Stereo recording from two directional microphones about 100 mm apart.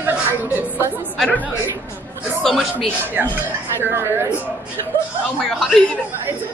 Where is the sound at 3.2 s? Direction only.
15° right (ahead or behind).